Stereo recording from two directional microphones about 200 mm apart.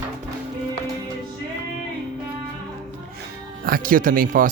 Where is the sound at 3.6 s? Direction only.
45° right (ahead or behind).